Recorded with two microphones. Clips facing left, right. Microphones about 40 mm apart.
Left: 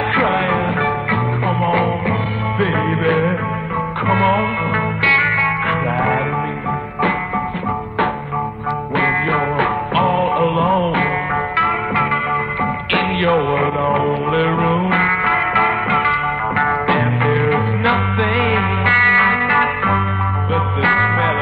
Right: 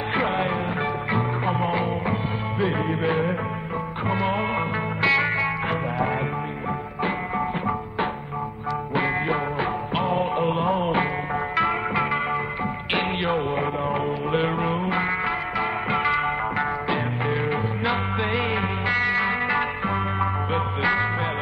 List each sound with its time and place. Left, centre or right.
0.1 s music: left
8.9 s music: left
12.9 s music: left
16.0 s music: left